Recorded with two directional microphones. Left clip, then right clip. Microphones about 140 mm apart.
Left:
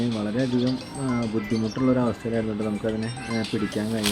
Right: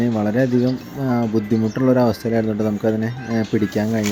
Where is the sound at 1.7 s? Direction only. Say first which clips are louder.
Right 7 dB; 30° right (ahead or behind).